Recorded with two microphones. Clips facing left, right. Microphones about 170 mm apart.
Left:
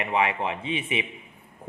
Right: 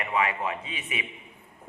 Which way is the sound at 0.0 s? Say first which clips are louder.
Left 2 dB; 25° left (ahead or behind).